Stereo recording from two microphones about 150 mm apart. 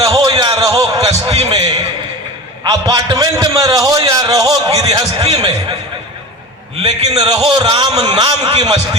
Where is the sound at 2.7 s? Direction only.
25° right (ahead or behind).